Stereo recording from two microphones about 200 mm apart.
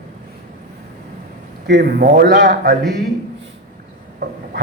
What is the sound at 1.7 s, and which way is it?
A man's voice, 55° right (ahead or behind).